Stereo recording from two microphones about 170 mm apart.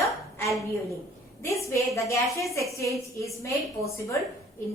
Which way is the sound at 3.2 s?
20° left (ahead or behind).